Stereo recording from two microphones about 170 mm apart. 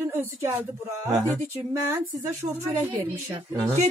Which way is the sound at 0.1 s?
15° right (ahead or behind).